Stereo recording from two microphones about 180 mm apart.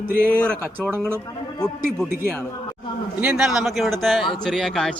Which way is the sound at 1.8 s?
55° right (ahead or behind).